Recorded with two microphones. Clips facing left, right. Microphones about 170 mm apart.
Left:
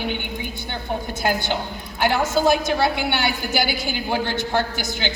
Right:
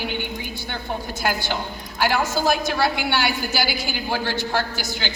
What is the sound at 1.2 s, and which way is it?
A woman's voice, 20° left (ahead or behind).